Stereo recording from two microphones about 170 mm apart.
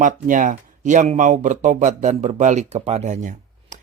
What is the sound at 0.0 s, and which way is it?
A man's voice, 50° right (ahead or behind).